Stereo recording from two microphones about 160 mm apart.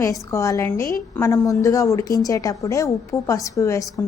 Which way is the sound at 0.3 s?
20° left (ahead or behind).